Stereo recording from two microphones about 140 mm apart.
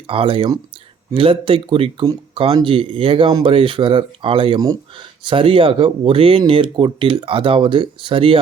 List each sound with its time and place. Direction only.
0.1 s speech: 40° right (ahead or behind)